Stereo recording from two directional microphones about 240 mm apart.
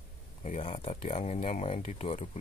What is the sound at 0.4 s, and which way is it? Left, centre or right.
Speech, left.